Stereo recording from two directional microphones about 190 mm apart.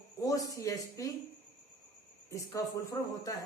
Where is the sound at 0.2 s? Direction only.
15° left (ahead or behind).